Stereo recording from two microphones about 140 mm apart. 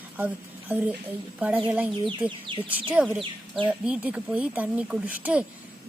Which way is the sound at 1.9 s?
35° right (ahead or behind).